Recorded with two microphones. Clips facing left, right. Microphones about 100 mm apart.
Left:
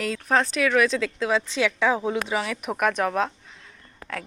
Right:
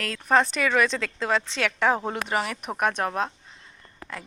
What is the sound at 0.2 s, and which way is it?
Speech, 5° right (ahead or behind).